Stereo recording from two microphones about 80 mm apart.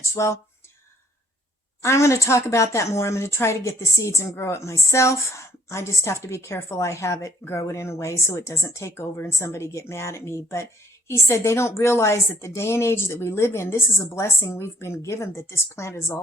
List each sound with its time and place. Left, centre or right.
0.1 s speech: left
1.8 s a woman's voice: left